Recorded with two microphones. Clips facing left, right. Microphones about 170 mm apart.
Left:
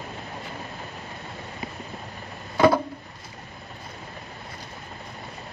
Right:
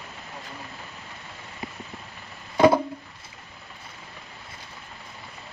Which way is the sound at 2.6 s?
20° right (ahead or behind).